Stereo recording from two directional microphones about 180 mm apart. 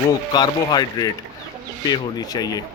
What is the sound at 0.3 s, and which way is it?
Speech, 20° left (ahead or behind).